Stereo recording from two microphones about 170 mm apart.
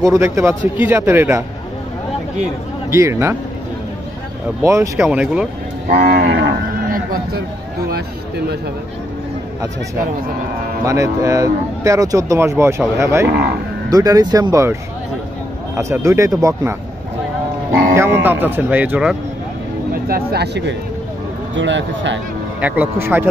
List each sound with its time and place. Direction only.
0.0 s speech: 15° right (ahead or behind)
2.9 s speech: 15° right (ahead or behind)
4.6 s speech: 15° right (ahead or behind)
5.0 s speech: 5° right (ahead or behind)
5.9 s speech: 65° right (ahead or behind)
10.9 s speech: 20° right (ahead or behind)
17.9 s speech: 15° right (ahead or behind)
19.9 s speech: 60° right (ahead or behind); by 22.2 s 90° right
22.6 s speech: 10° right (ahead or behind)